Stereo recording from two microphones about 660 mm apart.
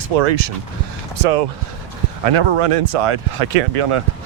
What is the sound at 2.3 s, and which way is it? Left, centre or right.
Speech, right.